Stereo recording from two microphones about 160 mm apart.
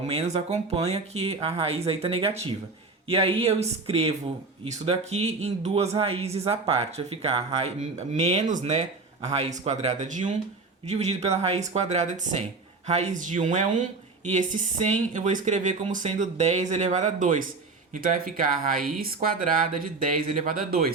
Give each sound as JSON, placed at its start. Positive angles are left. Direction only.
{"t": 0.1, "sound": "speech", "side_deg": -40}
{"t": 18.6, "sound": "speech", "side_deg": -65}